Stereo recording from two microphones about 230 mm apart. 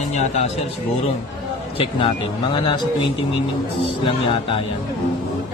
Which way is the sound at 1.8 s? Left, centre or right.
Left.